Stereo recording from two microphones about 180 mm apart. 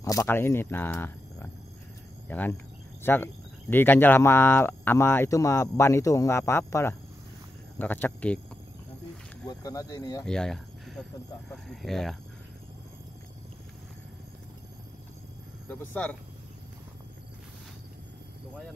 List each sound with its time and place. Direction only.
0.0 s speech: 20° left (ahead or behind)
9.5 s speech: 20° left (ahead or behind)
10.2 s a sound: 5° left (ahead or behind)
11.5 s speech: centre (ahead or behind)
15.7 s speech: 10° left (ahead or behind)